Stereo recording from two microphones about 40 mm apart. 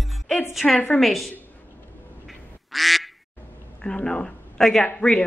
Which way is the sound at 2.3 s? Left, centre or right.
Centre.